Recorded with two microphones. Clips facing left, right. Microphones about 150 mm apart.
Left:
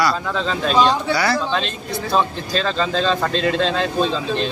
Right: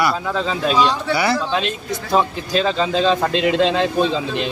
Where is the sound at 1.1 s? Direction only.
20° right (ahead or behind).